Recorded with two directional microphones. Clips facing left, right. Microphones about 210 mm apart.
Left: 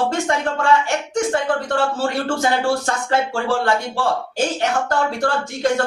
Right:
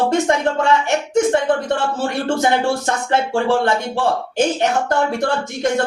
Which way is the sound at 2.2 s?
20° right (ahead or behind).